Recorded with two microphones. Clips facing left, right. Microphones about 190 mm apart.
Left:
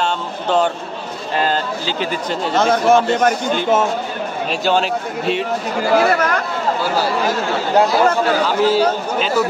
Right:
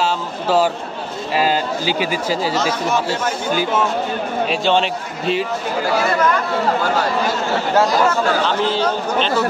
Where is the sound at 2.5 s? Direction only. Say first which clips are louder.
Left 6 dB; 55° left (ahead or behind).